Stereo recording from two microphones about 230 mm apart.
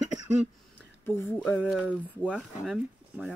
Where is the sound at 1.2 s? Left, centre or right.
Centre.